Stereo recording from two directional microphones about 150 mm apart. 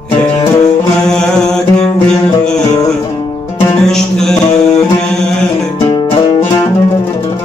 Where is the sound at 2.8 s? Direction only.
30° left (ahead or behind).